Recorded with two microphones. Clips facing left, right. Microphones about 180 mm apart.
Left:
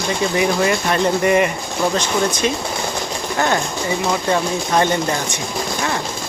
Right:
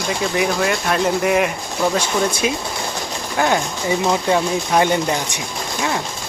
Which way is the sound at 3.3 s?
10° right (ahead or behind).